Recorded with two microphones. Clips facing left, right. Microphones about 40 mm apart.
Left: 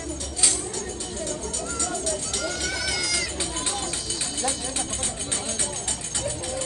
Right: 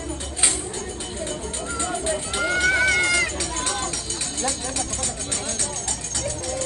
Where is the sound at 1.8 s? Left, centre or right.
Right.